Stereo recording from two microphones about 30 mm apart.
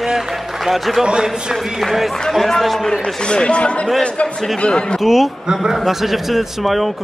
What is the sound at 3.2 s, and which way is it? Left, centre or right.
Speech, left.